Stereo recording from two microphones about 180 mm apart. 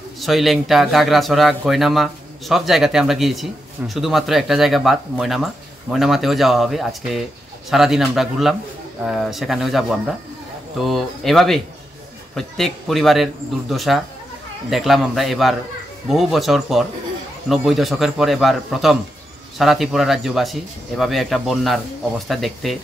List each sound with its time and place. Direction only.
0.2 s a man's voice: centre (ahead or behind)